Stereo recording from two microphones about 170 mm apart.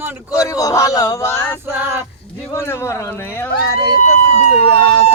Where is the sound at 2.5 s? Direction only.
15° left (ahead or behind).